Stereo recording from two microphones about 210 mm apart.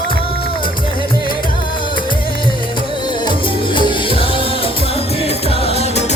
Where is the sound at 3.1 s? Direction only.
25° left (ahead or behind).